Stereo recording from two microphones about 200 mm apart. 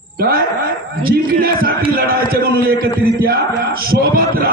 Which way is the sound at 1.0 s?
50° right (ahead or behind).